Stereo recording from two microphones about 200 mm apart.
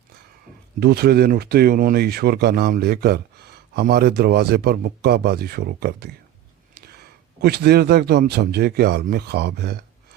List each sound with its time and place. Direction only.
0.8 s a man's voice: 50° right (ahead or behind)